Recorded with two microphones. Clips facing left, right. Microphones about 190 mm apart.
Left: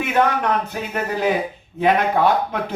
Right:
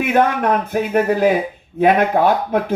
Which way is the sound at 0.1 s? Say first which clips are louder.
Right 3 dB; 50° right (ahead or behind).